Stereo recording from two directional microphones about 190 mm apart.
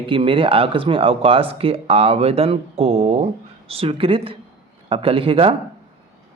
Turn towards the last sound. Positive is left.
turn(degrees=-30)  # may be behind; listen again after turning